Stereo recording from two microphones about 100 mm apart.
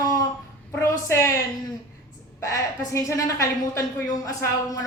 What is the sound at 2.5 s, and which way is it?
A woman's voice, 30° left (ahead or behind).